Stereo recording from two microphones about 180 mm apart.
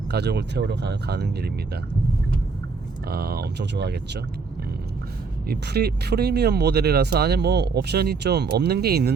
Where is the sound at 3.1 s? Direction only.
60° right (ahead or behind).